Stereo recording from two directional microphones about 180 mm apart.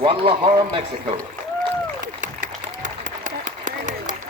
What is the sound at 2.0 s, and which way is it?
Applause, 45° right (ahead or behind).